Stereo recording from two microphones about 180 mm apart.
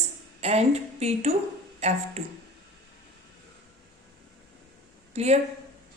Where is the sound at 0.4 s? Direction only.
35° right (ahead or behind).